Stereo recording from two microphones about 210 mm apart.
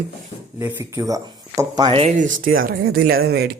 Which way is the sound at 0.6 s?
15° right (ahead or behind).